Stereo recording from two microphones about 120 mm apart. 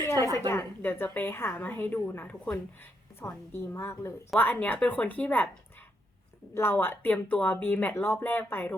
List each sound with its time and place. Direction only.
0.4 s a woman's voice: 20° left (ahead or behind)
6.5 s speech: 20° left (ahead or behind)